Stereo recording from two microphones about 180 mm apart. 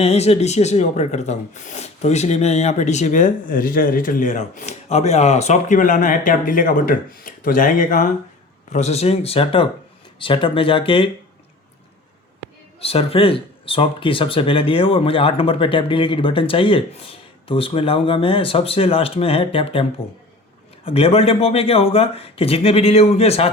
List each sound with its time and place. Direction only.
0.0 s speech: 35° left (ahead or behind)
8.7 s speech: 40° left (ahead or behind)
12.8 s speech: 35° left (ahead or behind)